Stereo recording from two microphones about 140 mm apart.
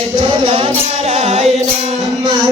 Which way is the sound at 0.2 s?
35° right (ahead or behind).